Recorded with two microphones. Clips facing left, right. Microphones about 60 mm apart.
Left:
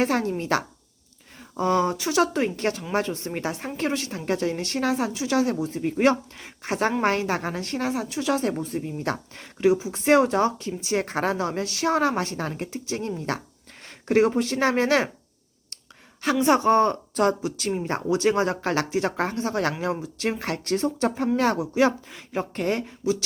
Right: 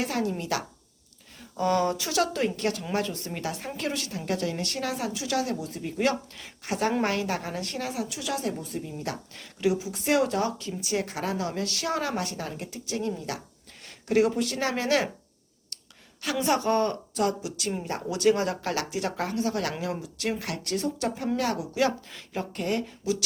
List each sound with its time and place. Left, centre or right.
0.0 s a woman's voice: left
16.4 s a woman's voice: left
17.2 s a woman's voice: left